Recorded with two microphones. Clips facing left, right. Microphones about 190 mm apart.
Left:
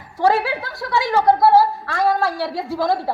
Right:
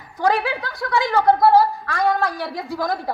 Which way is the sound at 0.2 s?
25° left (ahead or behind).